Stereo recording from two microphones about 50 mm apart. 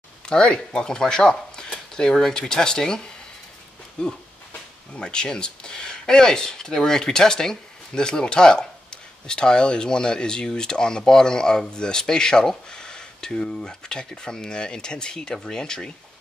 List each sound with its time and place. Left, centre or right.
0.3 s speech: centre